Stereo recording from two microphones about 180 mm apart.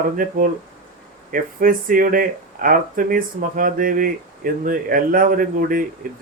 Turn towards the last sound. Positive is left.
turn(degrees=-50)  # may be behind; listen again after turning